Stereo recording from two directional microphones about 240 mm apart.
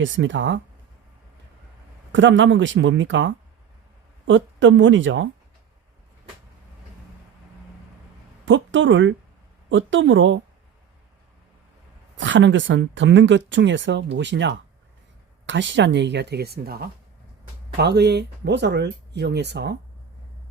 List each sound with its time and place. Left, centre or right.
0.0 s speech: right
2.1 s speech: right
8.4 s speech: right
12.1 s speech: right